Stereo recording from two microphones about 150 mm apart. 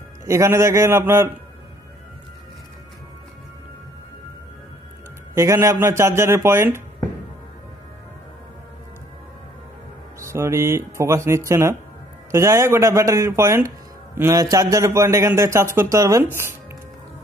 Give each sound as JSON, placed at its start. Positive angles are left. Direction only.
{"t": 0.3, "sound": "speech", "side_deg": -20}
{"t": 5.3, "sound": "speech", "side_deg": -20}
{"t": 10.2, "sound": "a man's voice", "side_deg": -20}